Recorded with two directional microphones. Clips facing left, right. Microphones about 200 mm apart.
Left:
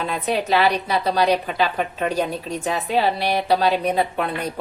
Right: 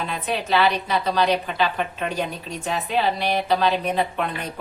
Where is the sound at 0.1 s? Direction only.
40° left (ahead or behind).